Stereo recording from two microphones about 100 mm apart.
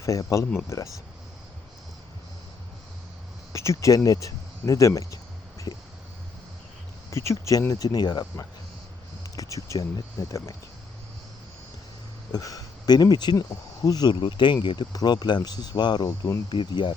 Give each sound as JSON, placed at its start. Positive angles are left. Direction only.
{"t": 0.0, "sound": "speech", "side_deg": 35}
{"t": 3.5, "sound": "a sound", "side_deg": 30}
{"t": 7.1, "sound": "speech", "side_deg": 30}
{"t": 12.3, "sound": "speech", "side_deg": 35}
{"t": 16.0, "sound": "speech", "side_deg": 30}
{"t": 16.5, "sound": "speech", "side_deg": 50}